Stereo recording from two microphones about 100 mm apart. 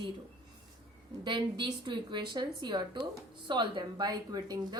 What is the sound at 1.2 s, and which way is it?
A woman's voice, 50° right (ahead or behind).